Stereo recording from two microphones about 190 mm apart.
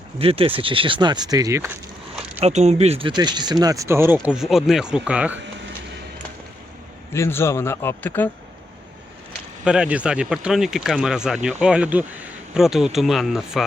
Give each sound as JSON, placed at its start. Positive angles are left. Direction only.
{"t": 0.2, "sound": "speech", "side_deg": -30}
{"t": 2.4, "sound": "speech", "side_deg": -35}
{"t": 7.1, "sound": "speech", "side_deg": 15}
{"t": 9.6, "sound": "speech", "side_deg": -5}